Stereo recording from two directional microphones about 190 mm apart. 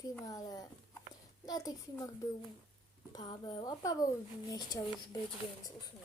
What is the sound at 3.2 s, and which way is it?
Speech, 20° left (ahead or behind).